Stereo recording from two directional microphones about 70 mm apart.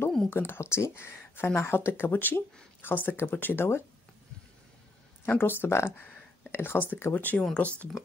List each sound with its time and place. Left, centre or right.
0.3 s speech: left
5.2 s speech: left